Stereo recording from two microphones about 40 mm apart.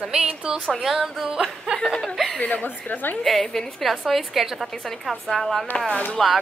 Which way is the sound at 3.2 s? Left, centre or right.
Centre.